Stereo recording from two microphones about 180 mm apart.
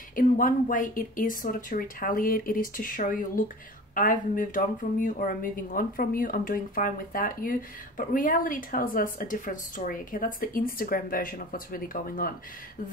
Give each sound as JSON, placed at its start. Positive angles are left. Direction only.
{"t": 0.1, "sound": "a woman's voice", "side_deg": 50}